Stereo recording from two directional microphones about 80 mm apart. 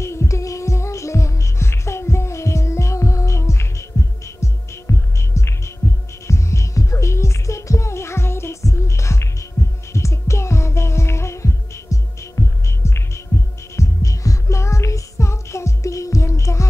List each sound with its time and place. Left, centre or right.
0.0 s music: left
9.6 s heart sounds: left
9.9 s music: left